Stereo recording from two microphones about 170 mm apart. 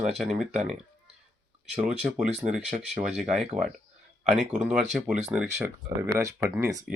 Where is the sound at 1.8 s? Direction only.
5° right (ahead or behind).